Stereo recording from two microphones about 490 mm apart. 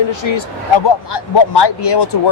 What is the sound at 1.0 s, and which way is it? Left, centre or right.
Speech, left.